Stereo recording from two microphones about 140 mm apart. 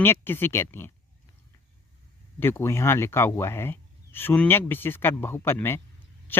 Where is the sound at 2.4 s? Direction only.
15° left (ahead or behind).